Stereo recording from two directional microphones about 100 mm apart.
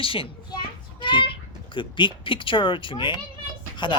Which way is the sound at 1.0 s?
55° left (ahead or behind).